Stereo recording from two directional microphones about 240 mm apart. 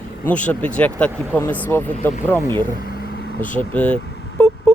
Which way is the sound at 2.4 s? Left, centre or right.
Centre.